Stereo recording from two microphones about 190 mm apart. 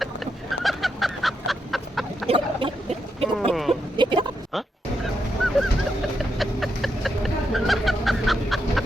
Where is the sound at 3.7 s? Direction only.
25° right (ahead or behind).